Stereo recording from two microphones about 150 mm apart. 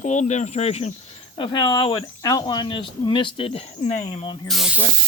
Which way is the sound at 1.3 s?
35° left (ahead or behind).